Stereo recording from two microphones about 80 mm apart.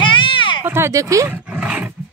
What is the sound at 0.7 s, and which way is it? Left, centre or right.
Speech, right.